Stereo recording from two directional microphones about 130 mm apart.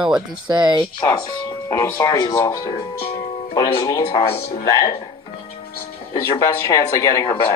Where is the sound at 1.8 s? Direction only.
25° left (ahead or behind).